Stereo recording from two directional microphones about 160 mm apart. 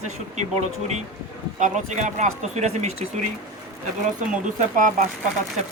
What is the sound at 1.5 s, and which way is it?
A man's voice, 50° right (ahead or behind).